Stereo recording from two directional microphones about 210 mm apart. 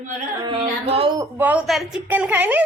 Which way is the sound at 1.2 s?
10° right (ahead or behind).